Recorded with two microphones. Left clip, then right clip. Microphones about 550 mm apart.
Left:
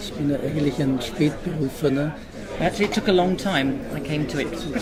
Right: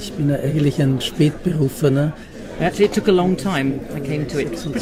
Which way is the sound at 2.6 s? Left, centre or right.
Right.